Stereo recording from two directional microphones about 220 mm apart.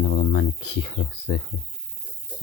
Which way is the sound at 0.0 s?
50° left (ahead or behind).